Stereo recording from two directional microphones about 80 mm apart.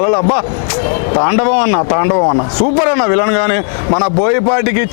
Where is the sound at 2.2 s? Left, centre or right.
Left.